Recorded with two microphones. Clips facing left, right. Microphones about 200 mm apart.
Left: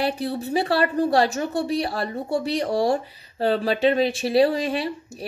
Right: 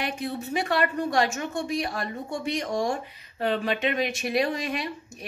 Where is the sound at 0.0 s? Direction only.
35° left (ahead or behind).